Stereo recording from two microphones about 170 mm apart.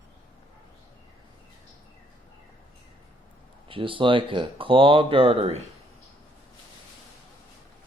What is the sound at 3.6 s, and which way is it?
Speech, 30° right (ahead or behind).